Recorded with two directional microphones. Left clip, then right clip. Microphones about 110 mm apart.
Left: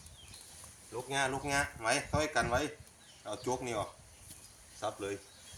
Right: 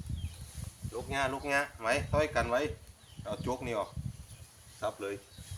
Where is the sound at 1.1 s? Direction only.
15° right (ahead or behind).